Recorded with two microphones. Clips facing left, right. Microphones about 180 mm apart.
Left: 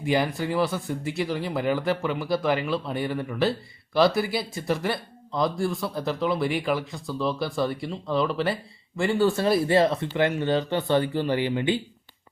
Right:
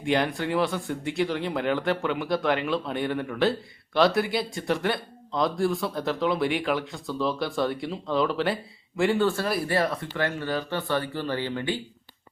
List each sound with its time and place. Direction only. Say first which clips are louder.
0.0 s speech: left 1 dB; 5° left (ahead or behind)
9.2 s speech: left 4 dB; 20° left (ahead or behind)